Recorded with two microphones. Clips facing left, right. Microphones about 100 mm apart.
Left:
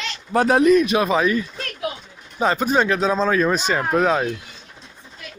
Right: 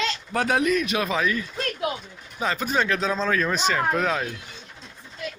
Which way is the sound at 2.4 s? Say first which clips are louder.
Left 6 dB; 30° left (ahead or behind).